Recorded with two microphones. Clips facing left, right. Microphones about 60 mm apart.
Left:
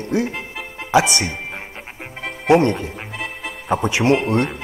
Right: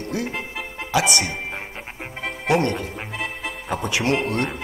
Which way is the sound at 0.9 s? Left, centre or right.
Left.